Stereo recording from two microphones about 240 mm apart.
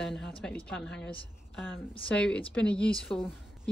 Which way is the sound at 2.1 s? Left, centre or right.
Centre.